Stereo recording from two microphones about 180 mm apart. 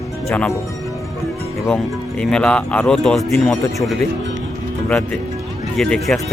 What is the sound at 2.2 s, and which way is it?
Speech, 5° left (ahead or behind).